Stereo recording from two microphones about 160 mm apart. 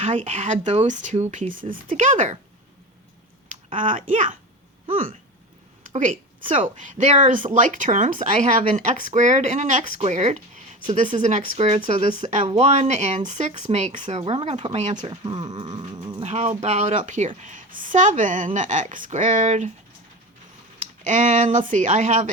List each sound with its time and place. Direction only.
0.0 s speech: 50° right (ahead or behind)
3.8 s a woman's voice: 55° right (ahead or behind)
15.1 s dog: 30° right (ahead or behind)
16.2 s speech: 45° right (ahead or behind)
21.0 s speech: 50° right (ahead or behind)